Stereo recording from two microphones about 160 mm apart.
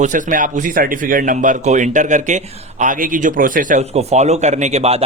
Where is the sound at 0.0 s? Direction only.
55° right (ahead or behind).